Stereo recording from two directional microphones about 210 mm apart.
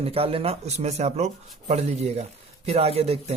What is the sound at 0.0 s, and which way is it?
A man's voice, 25° right (ahead or behind).